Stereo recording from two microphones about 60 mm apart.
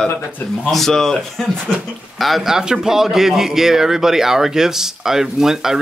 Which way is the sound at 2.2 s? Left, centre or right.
Centre.